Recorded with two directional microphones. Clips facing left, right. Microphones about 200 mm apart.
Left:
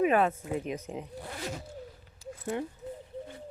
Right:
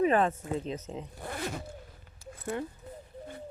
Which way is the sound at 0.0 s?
10° left (ahead or behind).